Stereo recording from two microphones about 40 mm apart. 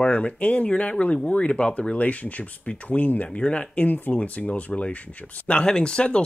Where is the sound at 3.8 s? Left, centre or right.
Left.